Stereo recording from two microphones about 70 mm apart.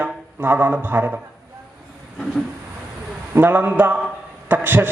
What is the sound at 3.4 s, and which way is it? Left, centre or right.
A man's voice, right.